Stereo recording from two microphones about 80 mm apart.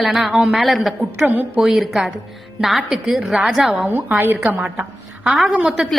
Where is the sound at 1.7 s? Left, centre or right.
Centre.